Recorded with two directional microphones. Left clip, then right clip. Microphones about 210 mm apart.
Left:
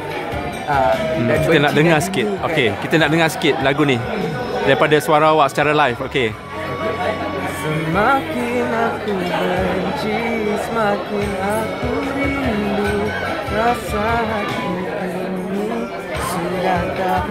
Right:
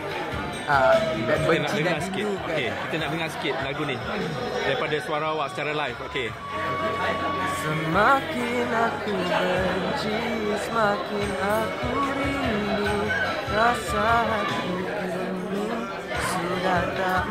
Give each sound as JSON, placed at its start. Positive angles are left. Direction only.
{"t": 0.7, "sound": "music", "side_deg": 0}
{"t": 1.6, "sound": "speech", "side_deg": 30}
{"t": 7.9, "sound": "music", "side_deg": 0}